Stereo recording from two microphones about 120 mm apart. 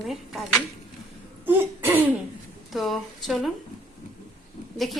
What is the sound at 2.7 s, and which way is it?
Speech, centre (ahead or behind).